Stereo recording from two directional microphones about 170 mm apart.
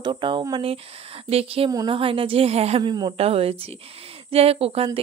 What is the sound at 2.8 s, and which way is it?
Speech, 25° right (ahead or behind).